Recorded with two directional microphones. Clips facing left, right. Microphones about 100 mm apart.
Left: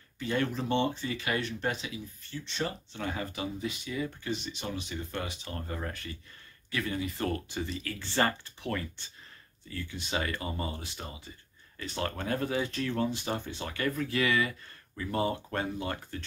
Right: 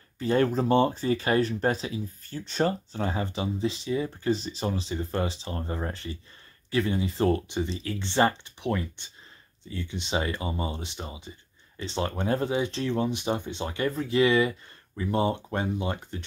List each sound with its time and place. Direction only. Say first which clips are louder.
0.2 s speech: right 7 dB; 35° right (ahead or behind); by 16.3 s 20° right (ahead or behind)